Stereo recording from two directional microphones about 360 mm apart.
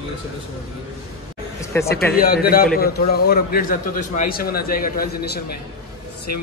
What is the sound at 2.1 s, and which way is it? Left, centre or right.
A man's voice, left.